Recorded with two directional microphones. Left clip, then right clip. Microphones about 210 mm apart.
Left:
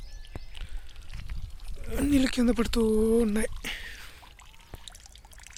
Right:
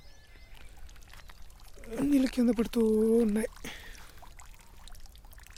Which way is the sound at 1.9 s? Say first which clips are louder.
Left 2 dB; centre (ahead or behind).